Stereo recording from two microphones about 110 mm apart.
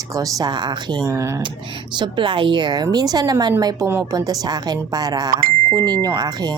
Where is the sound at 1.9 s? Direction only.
45° right (ahead or behind).